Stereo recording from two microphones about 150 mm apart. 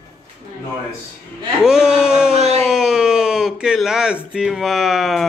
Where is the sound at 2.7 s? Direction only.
5° right (ahead or behind).